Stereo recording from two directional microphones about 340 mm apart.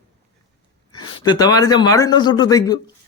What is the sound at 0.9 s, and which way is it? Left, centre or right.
Speech, centre.